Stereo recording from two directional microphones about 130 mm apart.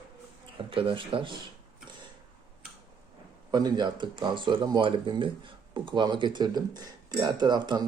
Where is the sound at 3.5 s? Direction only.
30° right (ahead or behind).